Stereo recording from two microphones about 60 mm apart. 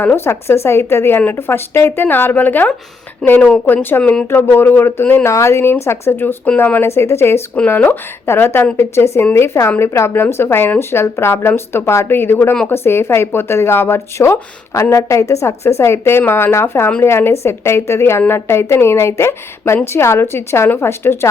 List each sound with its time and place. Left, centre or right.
0.3 s a woman's voice: left
5.2 s a woman's voice: left
6.8 s a woman's voice: left
7.7 s a woman's voice: left
9.9 s a woman's voice: left
10.2 s a woman's voice: left
14.7 s a woman's voice: left